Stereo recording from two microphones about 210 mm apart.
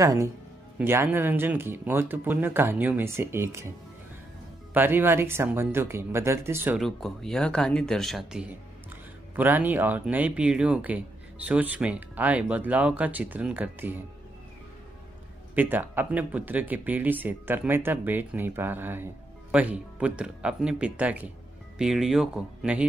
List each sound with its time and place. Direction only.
0.0 s speech: 15° right (ahead or behind)
4.7 s speech: 10° right (ahead or behind)
6.8 s speech: centre (ahead or behind)
15.5 s speech: 10° right (ahead or behind)